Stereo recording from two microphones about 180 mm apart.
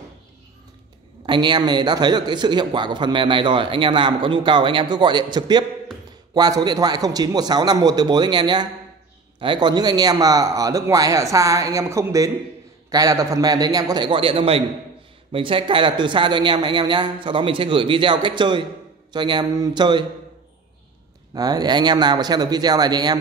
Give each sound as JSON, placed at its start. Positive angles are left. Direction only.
{"t": 1.2, "sound": "a man's voice", "side_deg": -25}
{"t": 21.4, "sound": "a man's voice", "side_deg": -20}